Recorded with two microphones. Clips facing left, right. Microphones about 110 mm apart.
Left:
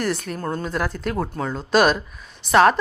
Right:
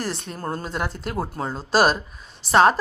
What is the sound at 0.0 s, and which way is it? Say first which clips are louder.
A woman's voice: left 4 dB; 30° right (ahead or behind).